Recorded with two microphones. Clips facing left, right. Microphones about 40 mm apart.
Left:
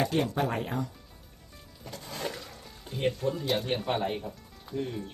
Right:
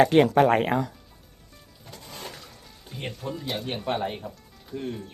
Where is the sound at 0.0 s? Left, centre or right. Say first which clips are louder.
Right 10 dB; right.